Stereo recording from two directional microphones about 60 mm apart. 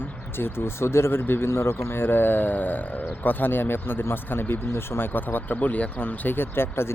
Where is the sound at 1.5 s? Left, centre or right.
Left.